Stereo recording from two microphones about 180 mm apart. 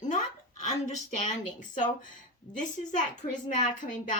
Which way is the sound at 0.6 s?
40° left (ahead or behind).